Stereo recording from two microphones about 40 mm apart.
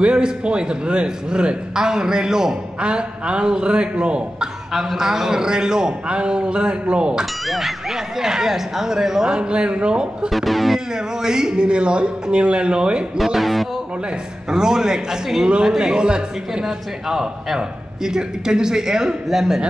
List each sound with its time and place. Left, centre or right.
0.0 s a man's voice: right
2.8 s a man's voice: right
4.9 s a man's voice: centre
7.4 s speech: centre
9.4 s a man's voice: right
10.3 s music: centre
10.9 s a man's voice: centre
13.2 s music: centre
14.5 s a man's voice: centre
16.6 s speech: centre